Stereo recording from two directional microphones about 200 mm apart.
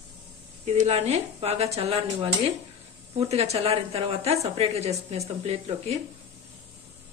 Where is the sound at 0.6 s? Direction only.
35° right (ahead or behind).